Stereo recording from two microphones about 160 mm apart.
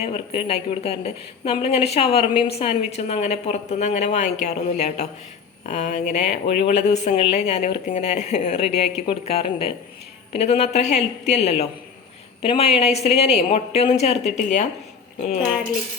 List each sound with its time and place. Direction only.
0.0 s a woman's voice: 40° left (ahead or behind)